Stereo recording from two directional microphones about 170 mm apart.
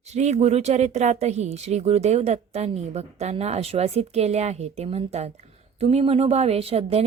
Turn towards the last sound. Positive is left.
turn(degrees=-35)  # may be behind; listen again after turning